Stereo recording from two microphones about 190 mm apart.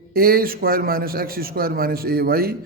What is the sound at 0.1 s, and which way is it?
A man's voice, 50° right (ahead or behind).